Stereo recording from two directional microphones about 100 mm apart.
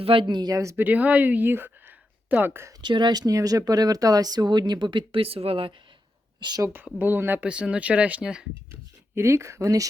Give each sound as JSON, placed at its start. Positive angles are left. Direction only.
{"t": 0.0, "sound": "speech", "side_deg": -60}
{"t": 0.9, "sound": "speech", "side_deg": -15}
{"t": 2.8, "sound": "speech", "side_deg": -50}
{"t": 6.4, "sound": "speech", "side_deg": -50}
{"t": 7.0, "sound": "speech", "side_deg": -20}
{"t": 8.7, "sound": "speech", "side_deg": -25}